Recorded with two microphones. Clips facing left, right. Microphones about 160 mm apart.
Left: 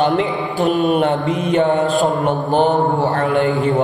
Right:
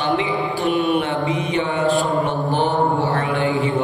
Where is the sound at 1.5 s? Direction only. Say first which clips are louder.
Left 10 dB; 45° left (ahead or behind).